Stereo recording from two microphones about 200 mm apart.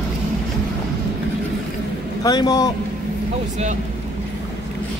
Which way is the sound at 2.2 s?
20° left (ahead or behind).